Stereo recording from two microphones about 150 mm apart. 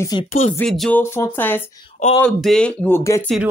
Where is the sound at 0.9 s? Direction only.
15° left (ahead or behind).